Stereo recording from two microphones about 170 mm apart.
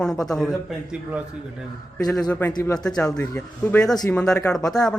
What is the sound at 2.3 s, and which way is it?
Speech, 15° left (ahead or behind).